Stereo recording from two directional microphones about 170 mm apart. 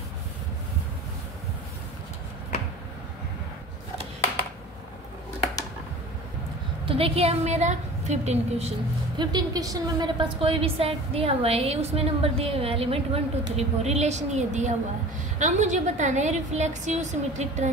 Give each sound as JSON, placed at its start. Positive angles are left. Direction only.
{"t": 6.9, "sound": "a woman's voice", "side_deg": -35}
{"t": 9.2, "sound": "a woman's voice", "side_deg": -25}